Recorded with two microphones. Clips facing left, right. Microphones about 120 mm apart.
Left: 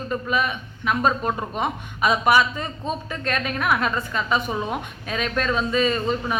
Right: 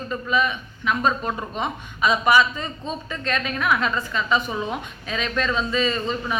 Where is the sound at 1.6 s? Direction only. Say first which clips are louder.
Even; 50° left (ahead or behind).